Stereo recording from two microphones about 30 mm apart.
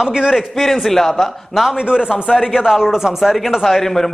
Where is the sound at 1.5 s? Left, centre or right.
Centre.